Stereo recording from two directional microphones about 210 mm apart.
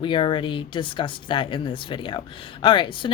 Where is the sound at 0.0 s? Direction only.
20° left (ahead or behind).